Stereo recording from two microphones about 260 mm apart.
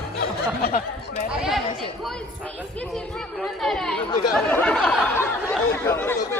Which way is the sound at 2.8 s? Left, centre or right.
Centre.